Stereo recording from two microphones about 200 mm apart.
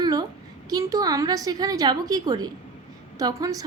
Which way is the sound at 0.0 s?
20° right (ahead or behind).